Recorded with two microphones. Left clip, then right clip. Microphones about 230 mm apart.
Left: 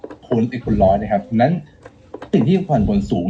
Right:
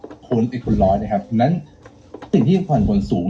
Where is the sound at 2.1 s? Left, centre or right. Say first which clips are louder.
Left 1 dB; centre.